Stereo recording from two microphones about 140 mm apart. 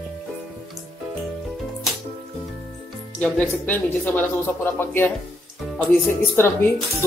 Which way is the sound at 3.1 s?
10° left (ahead or behind).